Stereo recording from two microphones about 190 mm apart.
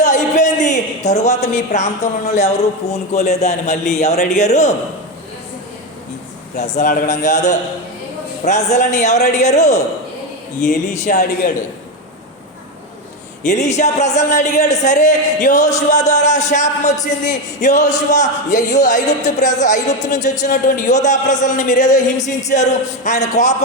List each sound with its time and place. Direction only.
0.0 s a man's voice: 40° left (ahead or behind)
6.6 s a man's voice: 40° left (ahead or behind)
13.4 s a man's voice: 40° left (ahead or behind)